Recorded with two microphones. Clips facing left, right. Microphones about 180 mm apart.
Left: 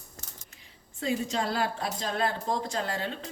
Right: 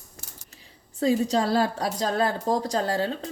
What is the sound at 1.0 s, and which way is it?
A woman's voice, 35° right (ahead or behind).